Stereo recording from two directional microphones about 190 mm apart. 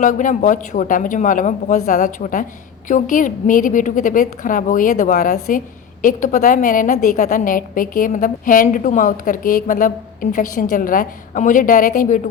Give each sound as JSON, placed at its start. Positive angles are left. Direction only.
{"t": 0.0, "sound": "speech", "side_deg": 40}